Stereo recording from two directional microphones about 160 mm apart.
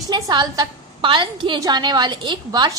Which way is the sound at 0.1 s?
25° right (ahead or behind).